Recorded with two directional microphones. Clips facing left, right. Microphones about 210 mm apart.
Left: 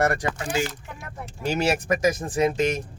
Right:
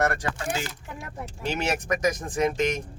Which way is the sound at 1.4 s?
35° left (ahead or behind).